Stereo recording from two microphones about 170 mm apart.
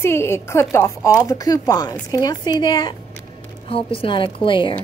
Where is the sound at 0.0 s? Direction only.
15° left (ahead or behind); by 4.7 s 30° left (ahead or behind).